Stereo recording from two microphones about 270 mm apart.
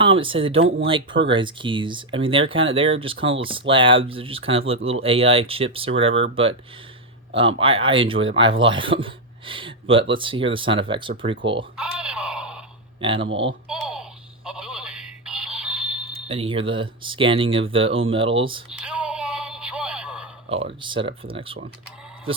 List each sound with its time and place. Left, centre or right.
0.0 s speech: centre
11.8 s wail: centre
13.0 s speech: centre
13.2 s speech: right
13.7 s a sound: centre
14.4 s music: centre
16.2 s speech: right
18.7 s music: centre
20.8 s speech: centre